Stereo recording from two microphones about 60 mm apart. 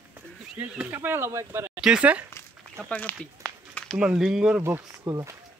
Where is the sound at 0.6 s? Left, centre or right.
Right.